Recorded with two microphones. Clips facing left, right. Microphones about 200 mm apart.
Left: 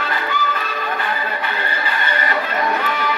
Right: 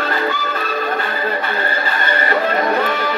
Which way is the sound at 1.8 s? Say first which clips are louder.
Right 3 dB; 40° right (ahead or behind).